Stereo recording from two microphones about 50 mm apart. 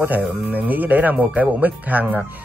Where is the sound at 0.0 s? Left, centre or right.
Right.